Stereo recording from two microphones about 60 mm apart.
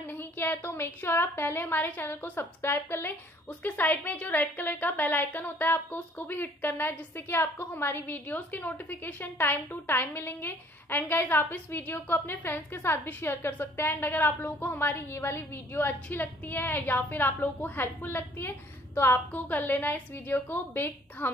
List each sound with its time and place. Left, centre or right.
0.0 s a woman's voice: left
3.4 s a woman's voice: left